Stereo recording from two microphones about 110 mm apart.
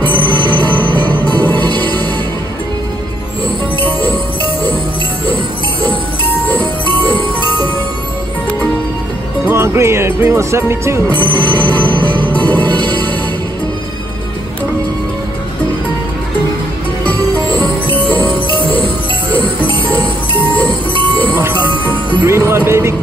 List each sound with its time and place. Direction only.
0.3 s music: 40° right (ahead or behind)
1.0 s music: 15° left (ahead or behind)
9.5 s music: 25° right (ahead or behind)
11.1 s music: 45° right (ahead or behind)
11.6 s music: 15° left (ahead or behind)
17.0 s music: 15° left (ahead or behind)
22.2 s music: 20° right (ahead or behind)